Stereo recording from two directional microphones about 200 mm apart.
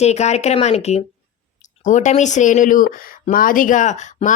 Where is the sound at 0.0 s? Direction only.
35° left (ahead or behind).